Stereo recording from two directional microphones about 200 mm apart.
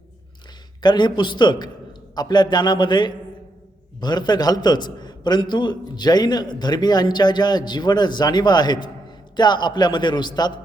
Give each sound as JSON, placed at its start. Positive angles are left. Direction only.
{"t": 0.8, "sound": "a man's voice", "side_deg": 20}